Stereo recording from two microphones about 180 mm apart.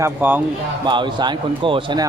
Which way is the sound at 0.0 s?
10° right (ahead or behind).